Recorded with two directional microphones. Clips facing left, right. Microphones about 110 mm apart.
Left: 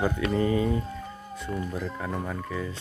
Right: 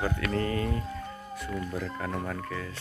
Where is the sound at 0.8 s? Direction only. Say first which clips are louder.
Left 1 dB; centre (ahead or behind).